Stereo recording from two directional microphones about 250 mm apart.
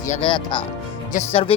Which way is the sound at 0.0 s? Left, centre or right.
Left.